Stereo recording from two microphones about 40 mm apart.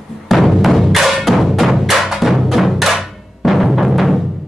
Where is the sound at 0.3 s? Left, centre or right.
Centre.